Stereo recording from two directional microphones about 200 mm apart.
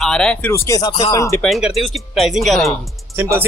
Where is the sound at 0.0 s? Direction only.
5° left (ahead or behind).